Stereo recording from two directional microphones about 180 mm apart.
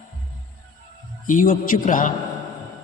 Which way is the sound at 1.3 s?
50° left (ahead or behind).